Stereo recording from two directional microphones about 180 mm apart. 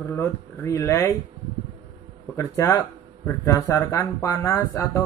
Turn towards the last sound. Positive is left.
turn(degrees=15)  # may be behind; listen again after turning